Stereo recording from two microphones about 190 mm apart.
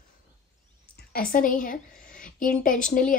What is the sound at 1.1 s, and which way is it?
A woman's voice, 50° left (ahead or behind).